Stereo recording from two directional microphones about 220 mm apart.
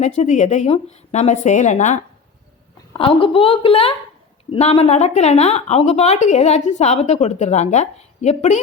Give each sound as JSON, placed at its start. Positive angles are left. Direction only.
{"t": 0.2, "sound": "a woman's voice", "side_deg": 30}